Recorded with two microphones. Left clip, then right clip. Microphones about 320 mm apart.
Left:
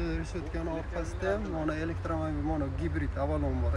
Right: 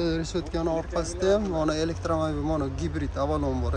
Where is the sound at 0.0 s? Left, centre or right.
Right.